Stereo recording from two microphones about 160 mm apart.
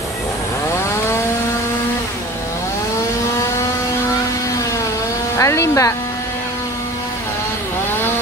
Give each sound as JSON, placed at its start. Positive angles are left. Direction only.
{"t": 5.4, "sound": "speech", "side_deg": 20}